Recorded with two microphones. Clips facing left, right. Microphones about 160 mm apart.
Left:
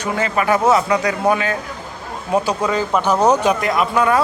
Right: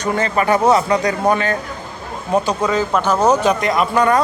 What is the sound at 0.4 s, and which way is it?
Speech, centre (ahead or behind).